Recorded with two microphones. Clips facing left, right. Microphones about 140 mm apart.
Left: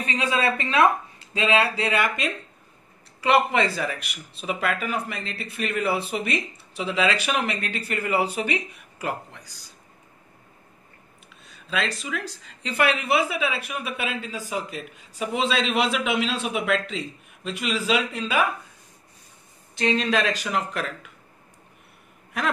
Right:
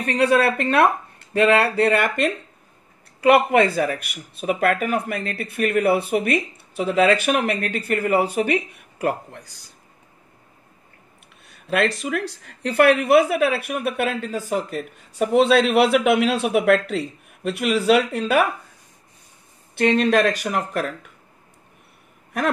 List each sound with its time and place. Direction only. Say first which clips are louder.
0.0 s speech: right 7 dB; 65° right (ahead or behind)
11.4 s speech: right 7 dB; 55° right (ahead or behind)
19.7 s speech: right 6 dB; 55° right (ahead or behind)